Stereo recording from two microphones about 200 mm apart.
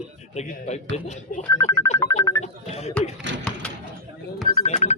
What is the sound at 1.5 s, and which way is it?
Speech, 15° left (ahead or behind).